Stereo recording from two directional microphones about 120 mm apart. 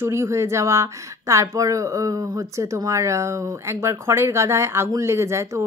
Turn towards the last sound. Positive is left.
turn(degrees=-25)  # may be behind; listen again after turning